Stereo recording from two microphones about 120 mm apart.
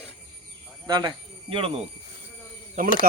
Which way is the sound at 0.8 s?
40° right (ahead or behind).